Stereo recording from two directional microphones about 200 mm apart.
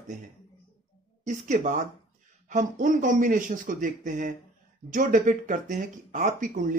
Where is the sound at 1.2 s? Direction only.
40° right (ahead or behind).